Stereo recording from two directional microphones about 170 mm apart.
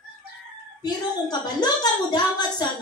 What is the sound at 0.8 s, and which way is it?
A woman's voice, 25° left (ahead or behind).